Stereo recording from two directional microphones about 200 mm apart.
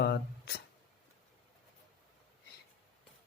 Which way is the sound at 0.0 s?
55° left (ahead or behind).